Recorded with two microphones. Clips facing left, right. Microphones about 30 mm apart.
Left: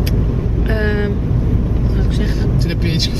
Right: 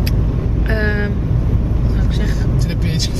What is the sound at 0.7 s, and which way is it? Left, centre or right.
Vehicle, centre.